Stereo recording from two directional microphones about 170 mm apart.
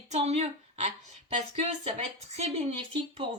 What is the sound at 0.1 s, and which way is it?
Speech, 40° right (ahead or behind).